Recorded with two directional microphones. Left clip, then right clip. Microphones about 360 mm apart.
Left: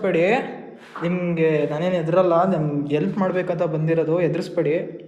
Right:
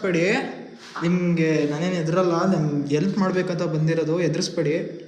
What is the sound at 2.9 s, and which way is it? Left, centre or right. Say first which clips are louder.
A man's voice: left 1 dB; centre.